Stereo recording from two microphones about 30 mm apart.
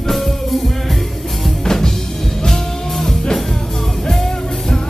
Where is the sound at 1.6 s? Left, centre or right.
Centre.